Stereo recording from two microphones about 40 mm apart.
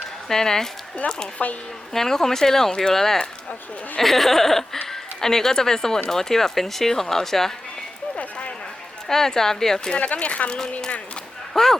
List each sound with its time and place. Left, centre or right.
0.3 s speech: centre
1.9 s speech: centre
8.2 s a sound: left
9.0 s speech: centre
10.0 s speech: left
11.5 s speech: centre